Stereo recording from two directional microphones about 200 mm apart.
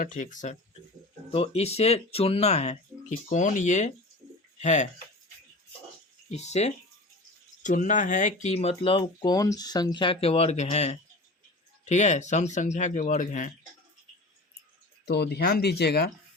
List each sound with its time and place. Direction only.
0.0 s speech: 40° left (ahead or behind)
6.3 s speech: 35° left (ahead or behind)
15.0 s speech: 55° left (ahead or behind)